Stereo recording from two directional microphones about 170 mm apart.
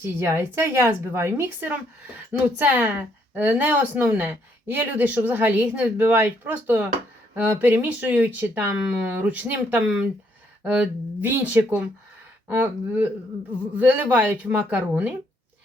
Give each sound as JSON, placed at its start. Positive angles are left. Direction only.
{"t": 0.0, "sound": "a woman's voice", "side_deg": -15}